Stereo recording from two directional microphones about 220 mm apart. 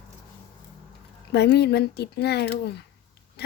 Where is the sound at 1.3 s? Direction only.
50° left (ahead or behind).